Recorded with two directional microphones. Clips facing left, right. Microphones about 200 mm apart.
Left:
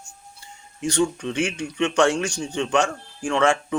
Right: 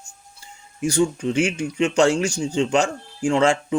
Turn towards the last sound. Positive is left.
turn(degrees=-25)  # may be behind; listen again after turning